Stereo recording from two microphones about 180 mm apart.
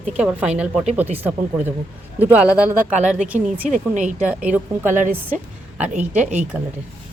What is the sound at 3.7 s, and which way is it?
Speech, 45° right (ahead or behind).